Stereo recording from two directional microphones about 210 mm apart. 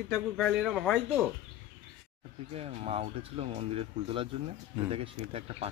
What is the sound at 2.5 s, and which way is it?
Speech, 30° right (ahead or behind).